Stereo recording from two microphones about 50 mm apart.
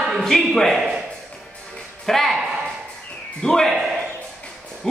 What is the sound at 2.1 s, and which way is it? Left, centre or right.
Speech, centre.